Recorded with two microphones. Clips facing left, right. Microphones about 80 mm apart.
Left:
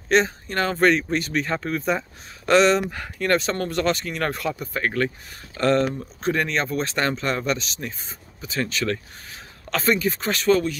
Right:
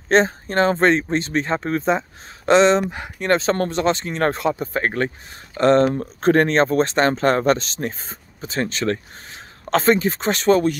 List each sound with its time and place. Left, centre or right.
0.1 s speech: right
3.7 s speech: right
5.9 s speech: right